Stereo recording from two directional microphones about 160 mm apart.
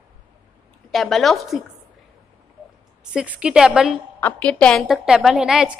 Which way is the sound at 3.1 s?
5° right (ahead or behind).